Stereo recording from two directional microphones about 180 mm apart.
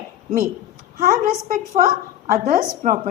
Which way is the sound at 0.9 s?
50° right (ahead or behind).